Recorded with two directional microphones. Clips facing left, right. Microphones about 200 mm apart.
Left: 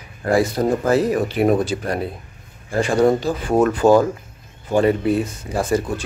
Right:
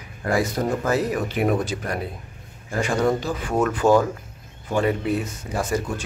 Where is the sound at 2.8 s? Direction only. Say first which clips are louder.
Left 5 dB; 35° left (ahead or behind).